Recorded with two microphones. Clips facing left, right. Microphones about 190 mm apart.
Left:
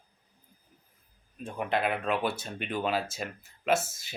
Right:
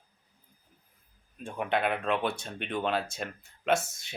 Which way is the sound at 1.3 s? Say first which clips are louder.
Even; centre (ahead or behind).